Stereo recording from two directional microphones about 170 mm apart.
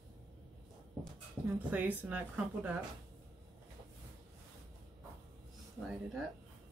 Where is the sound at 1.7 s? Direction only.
10° right (ahead or behind).